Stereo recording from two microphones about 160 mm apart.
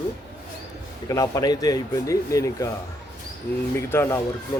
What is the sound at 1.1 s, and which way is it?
Speech, 20° left (ahead or behind).